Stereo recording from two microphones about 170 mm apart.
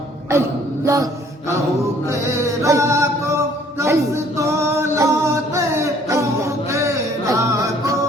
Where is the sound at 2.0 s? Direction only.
15° right (ahead or behind).